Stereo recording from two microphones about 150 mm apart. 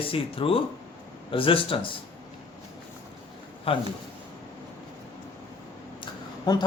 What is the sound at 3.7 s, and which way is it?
Speech, 40° left (ahead or behind).